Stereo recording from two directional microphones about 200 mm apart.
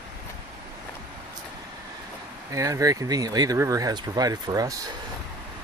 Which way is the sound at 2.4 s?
15° right (ahead or behind).